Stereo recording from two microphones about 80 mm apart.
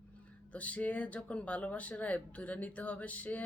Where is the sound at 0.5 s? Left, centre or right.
Centre.